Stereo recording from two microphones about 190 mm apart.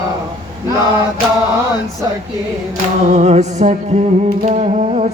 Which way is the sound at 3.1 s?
40° right (ahead or behind).